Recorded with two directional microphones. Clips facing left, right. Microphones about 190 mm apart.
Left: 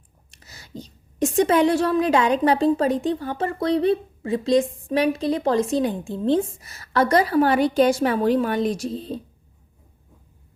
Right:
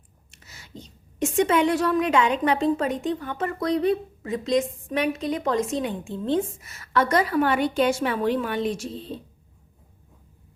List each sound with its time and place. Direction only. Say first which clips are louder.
0.3 s a woman's voice: left 4 dB; 35° left (ahead or behind)